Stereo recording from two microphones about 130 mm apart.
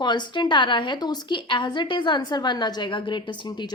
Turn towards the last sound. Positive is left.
turn(degrees=35)  # may be behind; listen again after turning